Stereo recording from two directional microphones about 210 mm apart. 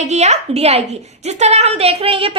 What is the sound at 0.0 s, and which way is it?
A woman's voice, 30° right (ahead or behind).